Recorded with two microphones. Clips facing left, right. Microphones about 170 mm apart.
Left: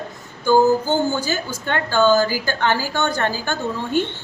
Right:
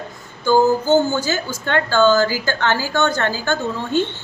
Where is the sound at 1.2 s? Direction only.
15° left (ahead or behind).